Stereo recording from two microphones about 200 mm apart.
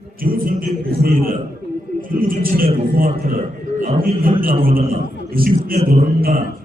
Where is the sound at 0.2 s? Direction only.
45° right (ahead or behind).